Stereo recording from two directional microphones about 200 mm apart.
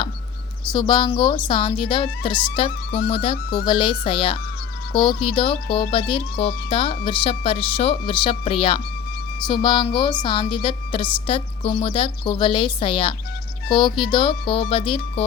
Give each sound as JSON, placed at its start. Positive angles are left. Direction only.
{"t": 0.7, "sound": "a woman's voice", "side_deg": 20}